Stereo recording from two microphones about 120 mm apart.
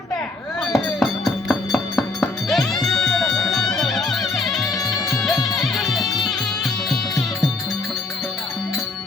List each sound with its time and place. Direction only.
0.6 s music: centre (ahead or behind)
4.8 s music: 30° left (ahead or behind)
5.2 s music: centre (ahead or behind)